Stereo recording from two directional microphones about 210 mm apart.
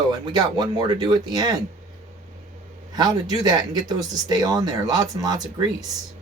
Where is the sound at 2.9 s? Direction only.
15° right (ahead or behind).